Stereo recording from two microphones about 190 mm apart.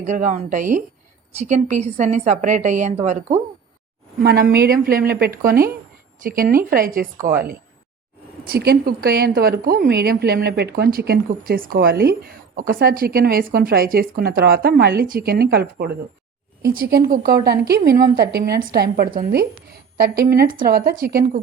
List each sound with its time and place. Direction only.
0.0 s a woman's voice: 40° right (ahead or behind)
4.2 s speech: 55° right (ahead or behind)